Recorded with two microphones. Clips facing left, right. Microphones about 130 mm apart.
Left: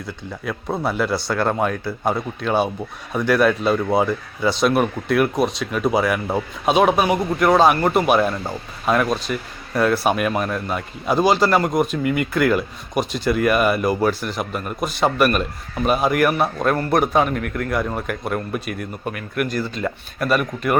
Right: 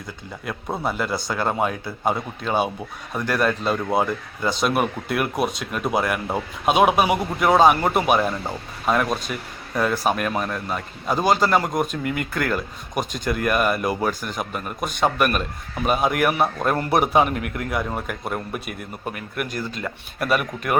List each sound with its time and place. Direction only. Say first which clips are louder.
0.4 s speech: left 3 dB; centre (ahead or behind)